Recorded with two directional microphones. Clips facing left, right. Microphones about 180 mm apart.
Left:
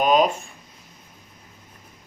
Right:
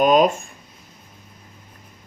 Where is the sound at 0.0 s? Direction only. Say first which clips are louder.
Right 3 dB; 45° right (ahead or behind).